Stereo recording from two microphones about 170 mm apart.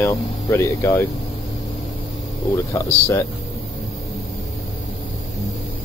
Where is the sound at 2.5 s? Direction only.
15° left (ahead or behind).